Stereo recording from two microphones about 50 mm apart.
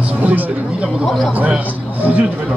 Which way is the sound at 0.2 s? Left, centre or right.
Right.